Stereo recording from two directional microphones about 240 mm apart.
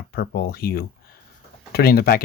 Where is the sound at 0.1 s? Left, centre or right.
Left.